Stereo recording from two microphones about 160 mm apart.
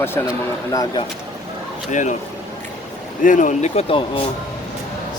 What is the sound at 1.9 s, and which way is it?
Speech, 50° left (ahead or behind).